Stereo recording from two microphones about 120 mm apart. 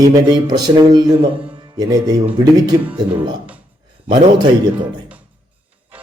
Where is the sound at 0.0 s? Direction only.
35° right (ahead or behind).